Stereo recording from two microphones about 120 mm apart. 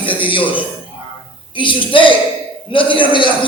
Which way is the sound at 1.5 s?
45° left (ahead or behind).